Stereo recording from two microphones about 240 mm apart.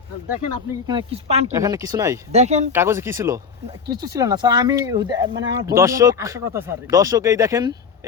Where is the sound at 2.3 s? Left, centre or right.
Right.